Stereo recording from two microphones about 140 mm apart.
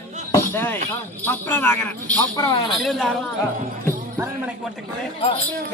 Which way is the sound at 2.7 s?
Centre (ahead or behind).